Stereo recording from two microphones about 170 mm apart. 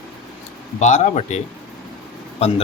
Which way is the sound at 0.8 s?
45° left (ahead or behind).